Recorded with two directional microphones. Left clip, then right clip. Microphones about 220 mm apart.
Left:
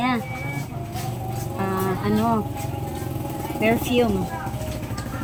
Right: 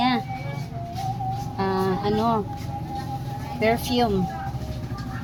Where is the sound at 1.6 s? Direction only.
30° right (ahead or behind).